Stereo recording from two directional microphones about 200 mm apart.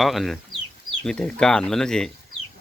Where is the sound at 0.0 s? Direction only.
Centre (ahead or behind).